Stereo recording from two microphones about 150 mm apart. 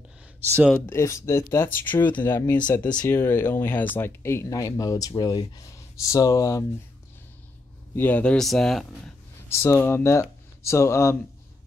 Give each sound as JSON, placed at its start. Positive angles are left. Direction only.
{"t": 0.7, "sound": "speech", "side_deg": 15}
{"t": 7.9, "sound": "speech", "side_deg": 10}
{"t": 9.5, "sound": "speech", "side_deg": 20}